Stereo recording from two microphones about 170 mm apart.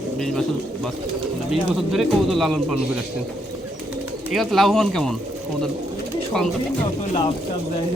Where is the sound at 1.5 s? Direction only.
Centre (ahead or behind).